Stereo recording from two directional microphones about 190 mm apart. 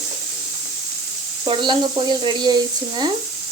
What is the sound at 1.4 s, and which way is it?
Speech, 25° right (ahead or behind).